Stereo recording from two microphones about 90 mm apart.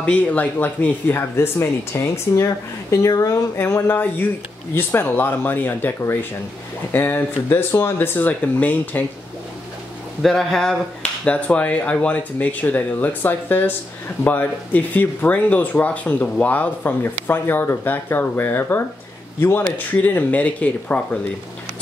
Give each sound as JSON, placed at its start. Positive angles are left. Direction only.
{"t": 0.0, "sound": "speech", "side_deg": 15}
{"t": 10.2, "sound": "speech", "side_deg": 5}